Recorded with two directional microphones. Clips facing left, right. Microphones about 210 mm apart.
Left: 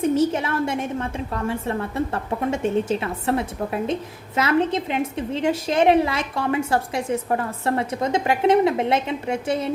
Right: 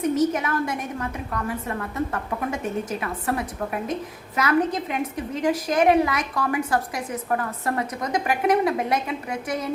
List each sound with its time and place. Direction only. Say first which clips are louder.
0.0 s a woman's voice: left 2 dB; 30° left (ahead or behind)